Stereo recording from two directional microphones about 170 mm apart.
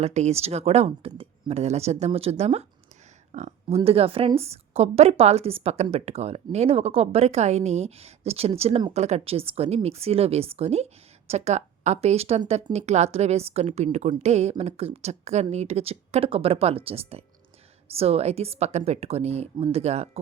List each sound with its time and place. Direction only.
0.0 s a woman's voice: 40° right (ahead or behind)